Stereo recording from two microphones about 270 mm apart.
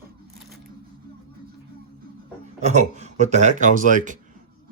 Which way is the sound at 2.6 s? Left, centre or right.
Right.